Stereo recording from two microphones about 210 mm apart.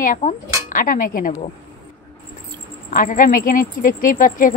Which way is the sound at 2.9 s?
40° left (ahead or behind).